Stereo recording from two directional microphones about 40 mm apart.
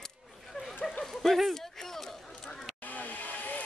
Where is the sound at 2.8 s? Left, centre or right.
Left.